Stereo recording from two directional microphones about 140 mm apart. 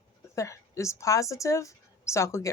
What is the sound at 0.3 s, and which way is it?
A woman's voice, 20° left (ahead or behind).